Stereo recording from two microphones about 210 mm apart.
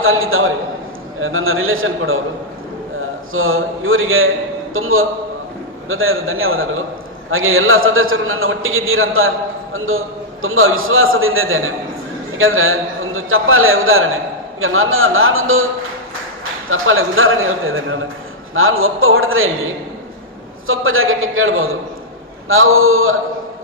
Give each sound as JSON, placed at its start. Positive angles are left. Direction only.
{"t": 0.0, "sound": "a man's voice", "side_deg": -75}
{"t": 3.3, "sound": "a man's voice", "side_deg": -75}
{"t": 20.7, "sound": "a man's voice", "side_deg": -75}